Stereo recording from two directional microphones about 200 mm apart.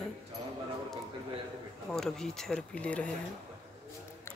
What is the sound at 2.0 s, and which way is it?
Speech, centre (ahead or behind).